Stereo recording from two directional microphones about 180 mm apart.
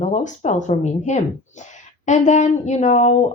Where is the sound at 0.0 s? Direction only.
40° left (ahead or behind).